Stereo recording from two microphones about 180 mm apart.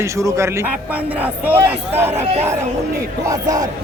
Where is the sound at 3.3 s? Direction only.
20° right (ahead or behind).